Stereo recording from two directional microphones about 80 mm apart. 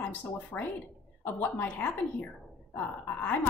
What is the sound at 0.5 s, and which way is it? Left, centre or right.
Speech, left.